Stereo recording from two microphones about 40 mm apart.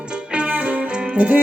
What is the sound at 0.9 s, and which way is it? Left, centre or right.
Music, right.